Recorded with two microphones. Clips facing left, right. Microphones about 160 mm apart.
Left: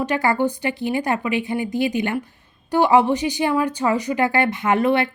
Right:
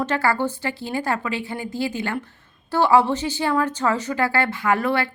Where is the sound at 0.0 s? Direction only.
15° left (ahead or behind).